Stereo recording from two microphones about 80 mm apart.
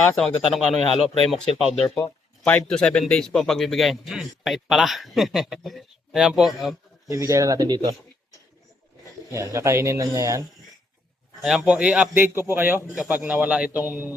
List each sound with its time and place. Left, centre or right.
0.2 s speech: centre
7.1 s speech: right
9.3 s speech: right
11.4 s speech: centre
12.1 s a man's voice: right